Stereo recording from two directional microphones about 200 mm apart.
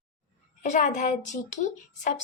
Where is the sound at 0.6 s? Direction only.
35° left (ahead or behind).